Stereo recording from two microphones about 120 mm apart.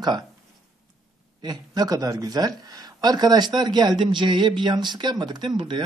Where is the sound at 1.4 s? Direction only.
35° right (ahead or behind).